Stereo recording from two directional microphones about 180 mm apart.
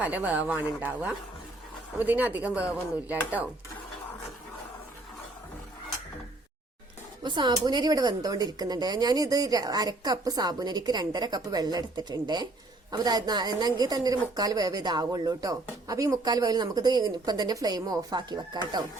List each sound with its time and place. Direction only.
0.0 s speech: 10° right (ahead or behind)
7.2 s a woman's voice: 25° right (ahead or behind)